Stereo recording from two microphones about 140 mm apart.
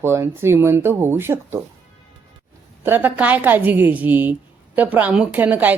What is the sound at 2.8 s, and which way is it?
Speech, 15° right (ahead or behind).